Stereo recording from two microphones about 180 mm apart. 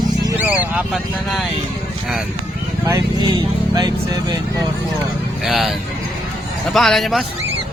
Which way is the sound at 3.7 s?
20° right (ahead or behind).